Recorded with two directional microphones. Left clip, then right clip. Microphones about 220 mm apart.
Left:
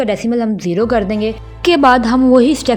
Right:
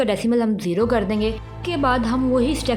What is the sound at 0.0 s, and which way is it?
A woman's voice, 10° left (ahead or behind).